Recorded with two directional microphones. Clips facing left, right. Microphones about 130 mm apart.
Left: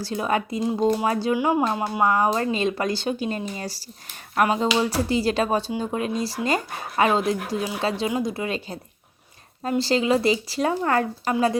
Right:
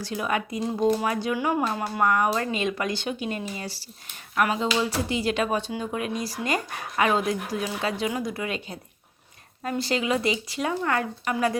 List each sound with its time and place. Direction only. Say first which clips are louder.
0.0 s speech: left 3 dB; 30° left (ahead or behind)
1.4 s speech: left 4 dB; 20° left (ahead or behind)